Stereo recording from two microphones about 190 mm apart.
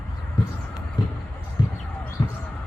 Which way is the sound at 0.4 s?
25° left (ahead or behind).